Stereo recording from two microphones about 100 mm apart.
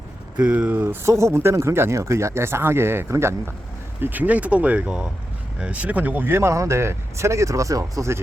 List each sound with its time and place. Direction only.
0.3 s speech: 15° right (ahead or behind); by 8.2 s 30° right (ahead or behind)